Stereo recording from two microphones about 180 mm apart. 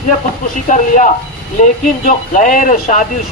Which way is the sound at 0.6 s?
45° left (ahead or behind).